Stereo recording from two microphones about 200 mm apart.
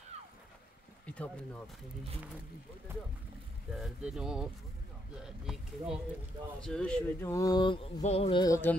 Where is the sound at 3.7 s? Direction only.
Centre (ahead or behind).